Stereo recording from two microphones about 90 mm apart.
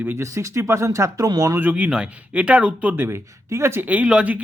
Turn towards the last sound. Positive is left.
turn(degrees=-15)  # may be behind; listen again after turning